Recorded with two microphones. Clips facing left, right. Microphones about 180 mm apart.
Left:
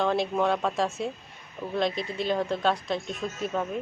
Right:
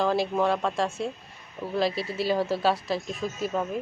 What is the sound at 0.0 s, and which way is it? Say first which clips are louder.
Speech: right 1 dB; centre (ahead or behind).